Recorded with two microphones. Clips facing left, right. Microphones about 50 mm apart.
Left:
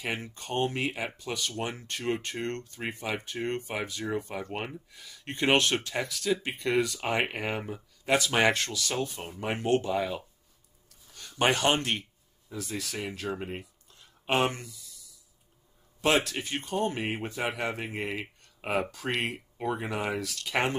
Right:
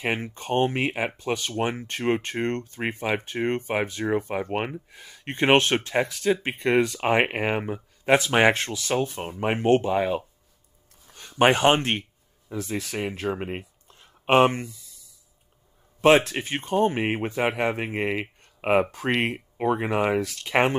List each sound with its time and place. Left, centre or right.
0.0 s speech: right
16.0 s speech: right